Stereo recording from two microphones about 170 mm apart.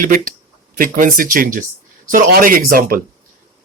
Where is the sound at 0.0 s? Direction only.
55° right (ahead or behind).